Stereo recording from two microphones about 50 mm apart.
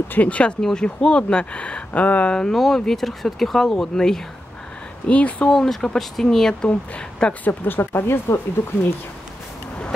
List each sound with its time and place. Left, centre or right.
0.1 s speech: left
0.6 s speech: centre; by 2.3 s left
2.3 s speech: centre
5.0 s speech: left
5.5 s speech: centre
6.7 s speech: left
7.4 s speech: left